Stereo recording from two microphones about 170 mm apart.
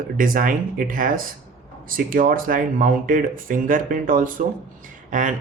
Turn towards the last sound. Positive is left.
turn(degrees=-50)  # may be behind; listen again after turning